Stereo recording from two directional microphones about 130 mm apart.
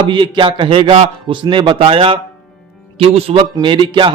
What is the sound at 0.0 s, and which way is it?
A man's voice, 40° right (ahead or behind).